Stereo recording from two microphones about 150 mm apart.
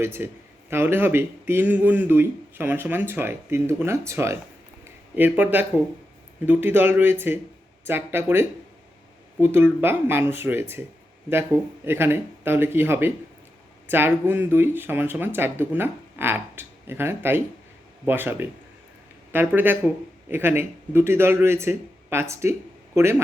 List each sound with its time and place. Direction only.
0.0 s speech: 15° right (ahead or behind)
11.9 s speech: 15° right (ahead or behind)